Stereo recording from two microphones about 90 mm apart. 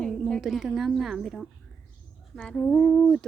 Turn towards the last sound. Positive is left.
turn(degrees=10)  # may be behind; listen again after turning